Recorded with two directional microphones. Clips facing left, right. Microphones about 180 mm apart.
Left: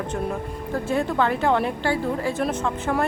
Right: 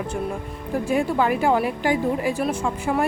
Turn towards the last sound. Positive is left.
turn(degrees=-10)  # may be behind; listen again after turning